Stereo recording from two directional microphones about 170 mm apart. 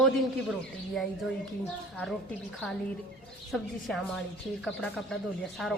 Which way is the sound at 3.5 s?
Centre (ahead or behind).